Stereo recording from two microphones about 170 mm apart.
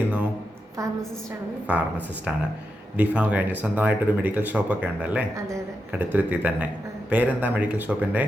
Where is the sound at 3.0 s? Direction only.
10° right (ahead or behind).